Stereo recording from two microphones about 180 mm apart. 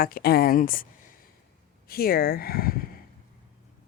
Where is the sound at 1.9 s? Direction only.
55° left (ahead or behind).